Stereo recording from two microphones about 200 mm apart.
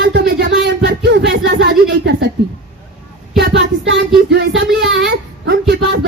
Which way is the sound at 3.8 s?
65° right (ahead or behind).